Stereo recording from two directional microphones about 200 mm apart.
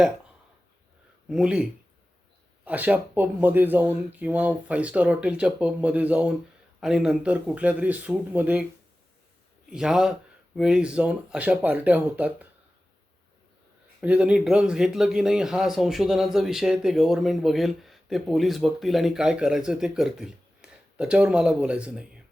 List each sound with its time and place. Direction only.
1.3 s speech: 5° right (ahead or behind)
2.6 s speech: 5° right (ahead or behind)
9.6 s speech: 5° right (ahead or behind)
14.0 s speech: 5° right (ahead or behind)